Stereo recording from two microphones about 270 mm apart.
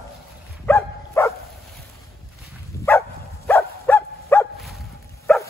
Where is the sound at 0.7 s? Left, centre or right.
Centre.